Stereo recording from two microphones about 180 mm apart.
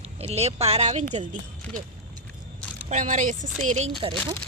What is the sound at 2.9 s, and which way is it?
Speech, 45° right (ahead or behind).